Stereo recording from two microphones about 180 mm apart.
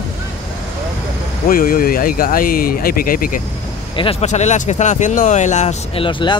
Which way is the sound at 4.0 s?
35° left (ahead or behind).